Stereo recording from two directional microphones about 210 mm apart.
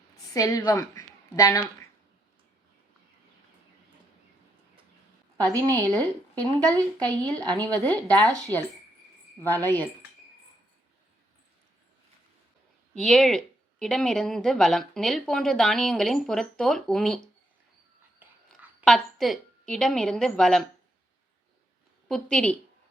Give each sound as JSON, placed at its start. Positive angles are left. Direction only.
{"t": 0.3, "sound": "a woman's voice", "side_deg": 15}
{"t": 5.4, "sound": "a woman's voice", "side_deg": 5}
{"t": 12.9, "sound": "speech", "side_deg": 0}
{"t": 18.9, "sound": "speech", "side_deg": 0}
{"t": 22.1, "sound": "speech", "side_deg": 5}